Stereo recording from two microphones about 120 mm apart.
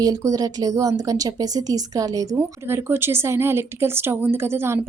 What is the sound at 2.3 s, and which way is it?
A woman's voice, 20° right (ahead or behind).